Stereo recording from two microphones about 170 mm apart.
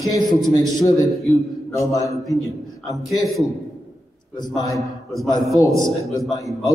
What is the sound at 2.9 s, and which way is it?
Speech, centre (ahead or behind).